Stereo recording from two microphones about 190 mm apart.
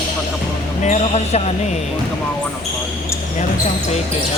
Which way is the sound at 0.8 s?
35° left (ahead or behind).